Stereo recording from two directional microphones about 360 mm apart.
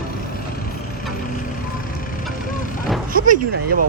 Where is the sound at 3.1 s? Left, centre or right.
Right.